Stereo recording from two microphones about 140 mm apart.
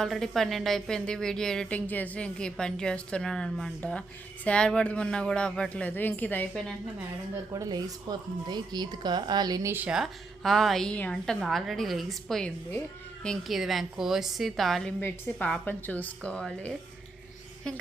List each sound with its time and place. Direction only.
0.0 s a woman's voice: 5° left (ahead or behind)
7.5 s a woman's voice: 25° right (ahead or behind)
9.7 s a woman's voice: 5° right (ahead or behind)